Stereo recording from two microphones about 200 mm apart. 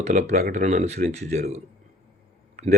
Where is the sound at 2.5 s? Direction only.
35° right (ahead or behind).